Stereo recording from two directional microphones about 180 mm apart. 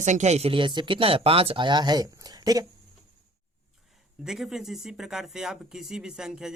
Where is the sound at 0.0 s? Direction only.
40° right (ahead or behind); by 2.6 s 20° right (ahead or behind).